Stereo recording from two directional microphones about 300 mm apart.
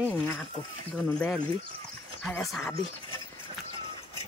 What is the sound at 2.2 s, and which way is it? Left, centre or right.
Speech, centre.